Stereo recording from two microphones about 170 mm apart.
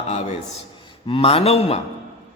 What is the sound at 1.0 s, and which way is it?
Speech, 30° left (ahead or behind).